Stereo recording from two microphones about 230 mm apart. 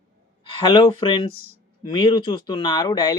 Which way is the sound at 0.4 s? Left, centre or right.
Left.